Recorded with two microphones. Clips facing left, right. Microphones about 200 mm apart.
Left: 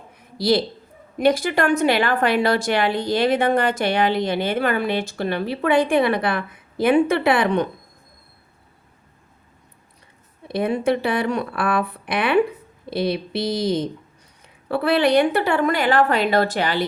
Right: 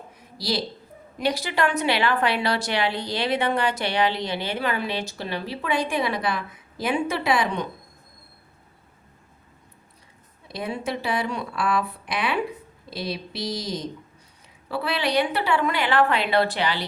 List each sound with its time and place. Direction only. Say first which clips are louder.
0.2 s a sound: left 9 dB; 55° left (ahead or behind)
1.2 s a woman's voice: left 6 dB; 50° left (ahead or behind)
10.5 s a woman's voice: left 9 dB; 55° left (ahead or behind)